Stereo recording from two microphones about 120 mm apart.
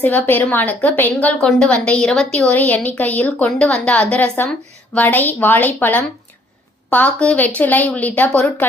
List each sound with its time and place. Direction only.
0.0 s a woman's voice: 15° left (ahead or behind)